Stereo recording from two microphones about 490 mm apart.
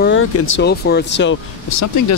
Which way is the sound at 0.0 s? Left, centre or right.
Left.